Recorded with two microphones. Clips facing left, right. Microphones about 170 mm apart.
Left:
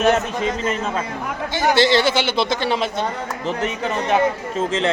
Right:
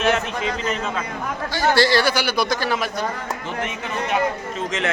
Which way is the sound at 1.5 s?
20° left (ahead or behind).